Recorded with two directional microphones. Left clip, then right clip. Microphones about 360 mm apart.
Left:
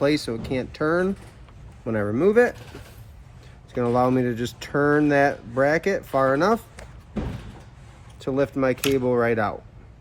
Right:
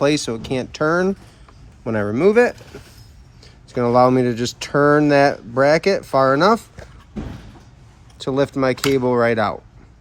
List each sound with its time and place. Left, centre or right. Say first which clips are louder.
0.0 s speech: right 4 dB; right
3.8 s speech: right 7 dB; right
8.2 s speech: right 4 dB; right